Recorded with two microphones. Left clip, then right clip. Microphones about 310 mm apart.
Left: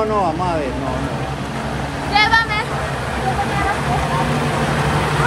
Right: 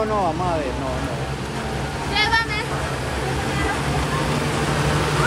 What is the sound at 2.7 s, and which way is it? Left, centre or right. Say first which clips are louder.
Vehicle: left 3 dB; centre.